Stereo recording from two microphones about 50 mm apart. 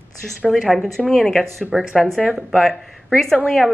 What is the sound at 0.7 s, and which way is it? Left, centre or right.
Speech, centre.